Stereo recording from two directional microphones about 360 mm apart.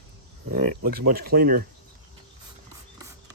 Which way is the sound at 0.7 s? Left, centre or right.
Right.